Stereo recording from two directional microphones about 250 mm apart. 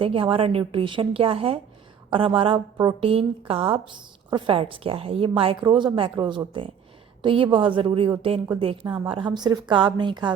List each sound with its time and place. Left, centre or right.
0.0 s a woman's voice: right